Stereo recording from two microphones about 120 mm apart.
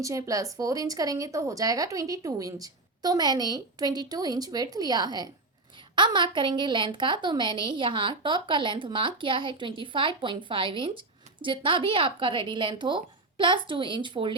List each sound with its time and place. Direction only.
0.0 s a woman's voice: 30° right (ahead or behind); by 14.3 s 45° right (ahead or behind)